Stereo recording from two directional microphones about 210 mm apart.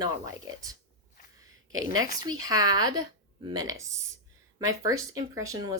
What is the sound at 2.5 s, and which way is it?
A woman's voice, 20° right (ahead or behind).